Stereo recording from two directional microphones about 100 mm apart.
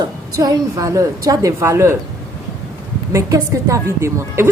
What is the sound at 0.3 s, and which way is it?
A woman's voice, 35° right (ahead or behind).